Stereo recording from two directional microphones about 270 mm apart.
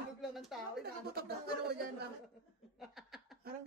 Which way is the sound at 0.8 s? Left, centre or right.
Right.